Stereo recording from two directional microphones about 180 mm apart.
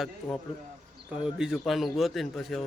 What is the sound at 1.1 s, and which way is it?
A man's voice, 5° right (ahead or behind).